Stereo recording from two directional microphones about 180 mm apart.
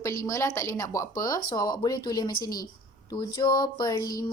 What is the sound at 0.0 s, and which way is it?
Speech, 15° left (ahead or behind).